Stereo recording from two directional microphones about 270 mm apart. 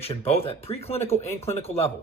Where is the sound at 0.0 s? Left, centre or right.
Left.